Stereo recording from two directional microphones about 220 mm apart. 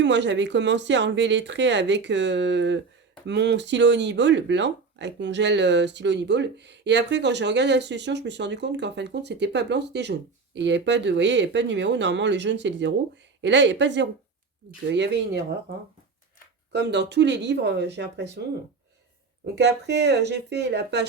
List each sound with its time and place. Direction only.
0.0 s speech: 55° right (ahead or behind)
16.7 s speech: 50° right (ahead or behind)
19.5 s speech: 50° right (ahead or behind)